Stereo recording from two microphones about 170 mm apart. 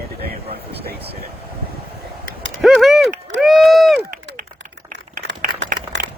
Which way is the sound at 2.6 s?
Centre (ahead or behind).